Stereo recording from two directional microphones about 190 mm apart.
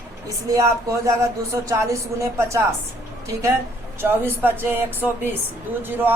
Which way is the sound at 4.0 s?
10° right (ahead or behind).